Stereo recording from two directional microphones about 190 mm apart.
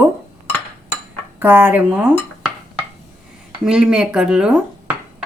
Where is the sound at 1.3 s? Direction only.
10° right (ahead or behind).